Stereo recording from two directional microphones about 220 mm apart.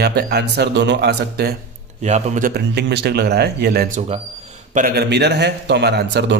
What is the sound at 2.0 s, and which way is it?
Speech, 30° right (ahead or behind).